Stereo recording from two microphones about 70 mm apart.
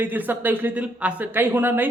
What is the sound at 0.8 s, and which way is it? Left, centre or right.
Speech, centre.